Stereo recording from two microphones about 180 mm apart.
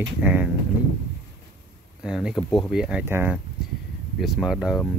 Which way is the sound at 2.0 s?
5° right (ahead or behind).